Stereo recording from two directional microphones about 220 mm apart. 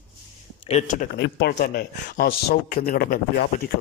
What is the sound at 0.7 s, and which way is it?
Speech, 30° left (ahead or behind).